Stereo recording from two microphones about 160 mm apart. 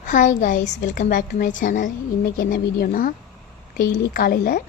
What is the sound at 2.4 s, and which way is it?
Speech, 65° left (ahead or behind).